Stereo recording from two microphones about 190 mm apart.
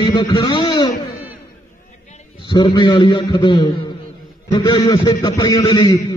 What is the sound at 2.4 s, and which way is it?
A man's voice, 25° left (ahead or behind).